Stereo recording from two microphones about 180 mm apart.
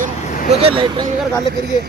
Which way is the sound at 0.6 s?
35° right (ahead or behind).